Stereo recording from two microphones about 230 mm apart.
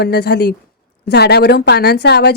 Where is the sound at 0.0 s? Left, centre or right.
Left.